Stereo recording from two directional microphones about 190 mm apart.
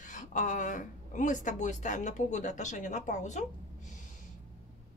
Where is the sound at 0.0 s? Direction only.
40° left (ahead or behind).